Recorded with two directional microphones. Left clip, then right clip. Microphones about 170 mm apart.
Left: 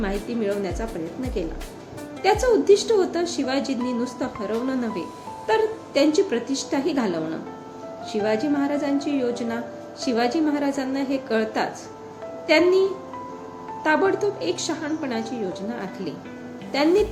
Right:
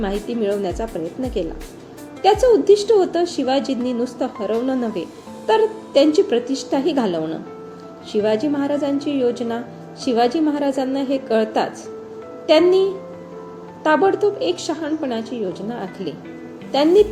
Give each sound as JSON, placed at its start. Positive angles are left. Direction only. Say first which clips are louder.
{"t": 0.0, "sound": "a woman's voice", "louder": "right 4 dB", "side_deg": -20}
{"t": 2.2, "sound": "a woman's voice", "louder": "right 5 dB", "side_deg": -20}
{"t": 13.8, "sound": "a woman's voice", "louder": "right 5 dB", "side_deg": -15}